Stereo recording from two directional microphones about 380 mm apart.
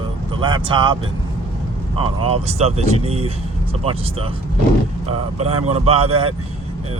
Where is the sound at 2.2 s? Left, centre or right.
Centre.